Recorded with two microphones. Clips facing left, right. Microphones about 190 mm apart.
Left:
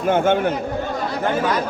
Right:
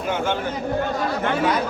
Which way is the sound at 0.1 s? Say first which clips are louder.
Left 7 dB; 50° left (ahead or behind).